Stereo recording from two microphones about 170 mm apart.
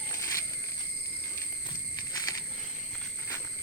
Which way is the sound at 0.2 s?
15° left (ahead or behind).